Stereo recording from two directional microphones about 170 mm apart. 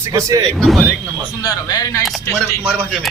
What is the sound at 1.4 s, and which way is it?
Speech, 25° left (ahead or behind).